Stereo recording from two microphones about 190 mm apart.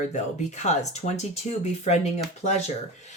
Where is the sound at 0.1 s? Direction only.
40° left (ahead or behind).